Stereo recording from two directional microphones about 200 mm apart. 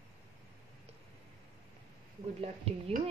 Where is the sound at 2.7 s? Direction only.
30° right (ahead or behind).